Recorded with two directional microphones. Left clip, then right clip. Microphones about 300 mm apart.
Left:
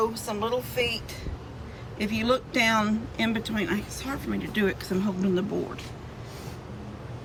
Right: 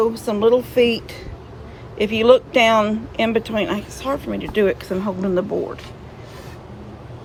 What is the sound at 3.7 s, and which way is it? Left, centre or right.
Speech, centre.